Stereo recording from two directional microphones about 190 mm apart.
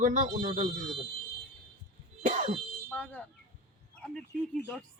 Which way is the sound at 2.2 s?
40° right (ahead or behind).